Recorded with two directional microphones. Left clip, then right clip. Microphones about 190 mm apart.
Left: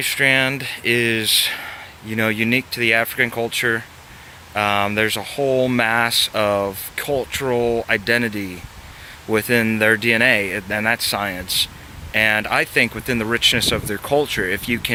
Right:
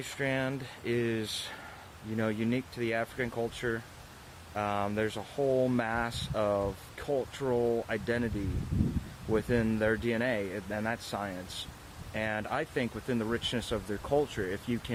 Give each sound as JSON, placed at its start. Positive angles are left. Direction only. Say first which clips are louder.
{"t": 0.0, "sound": "speech", "louder": "left 16 dB", "side_deg": 15}
{"t": 9.3, "sound": "speech", "louder": "left 12 dB", "side_deg": 15}